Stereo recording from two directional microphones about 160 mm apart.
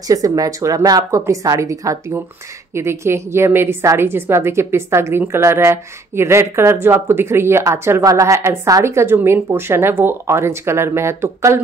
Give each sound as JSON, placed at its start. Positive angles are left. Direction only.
{"t": 0.1, "sound": "a woman's voice", "side_deg": -20}